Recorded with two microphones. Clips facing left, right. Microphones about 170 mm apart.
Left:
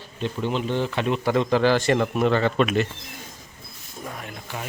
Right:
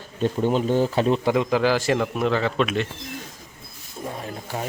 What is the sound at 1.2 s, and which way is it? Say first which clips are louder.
A man's voice: even; 10° right (ahead or behind).